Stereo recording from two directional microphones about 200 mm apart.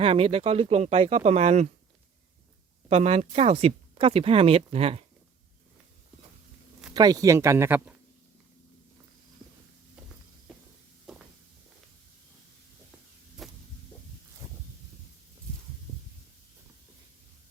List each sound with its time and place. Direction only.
0.0 s speech: 30° right (ahead or behind)
2.9 s speech: 35° right (ahead or behind)
6.9 s speech: 20° right (ahead or behind)
10.5 s a sound: centre (ahead or behind)
11.0 s walk: 5° right (ahead or behind)
13.4 s heart sounds: centre (ahead or behind)